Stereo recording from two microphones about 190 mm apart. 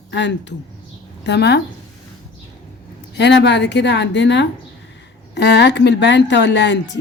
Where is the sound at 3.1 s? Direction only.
65° left (ahead or behind).